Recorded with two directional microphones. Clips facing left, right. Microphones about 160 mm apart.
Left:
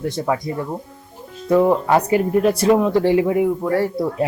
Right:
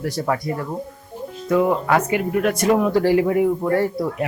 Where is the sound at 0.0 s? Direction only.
20° left (ahead or behind).